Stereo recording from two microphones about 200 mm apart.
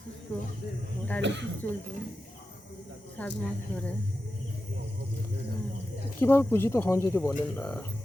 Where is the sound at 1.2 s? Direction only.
60° right (ahead or behind).